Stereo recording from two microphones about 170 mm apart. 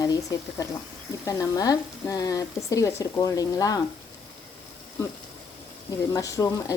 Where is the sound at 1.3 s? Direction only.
20° left (ahead or behind).